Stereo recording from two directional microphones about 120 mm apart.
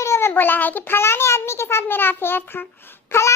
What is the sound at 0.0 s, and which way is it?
A child's voice, 20° left (ahead or behind).